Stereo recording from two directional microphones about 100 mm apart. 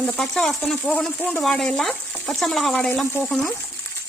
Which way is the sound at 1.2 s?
15° left (ahead or behind).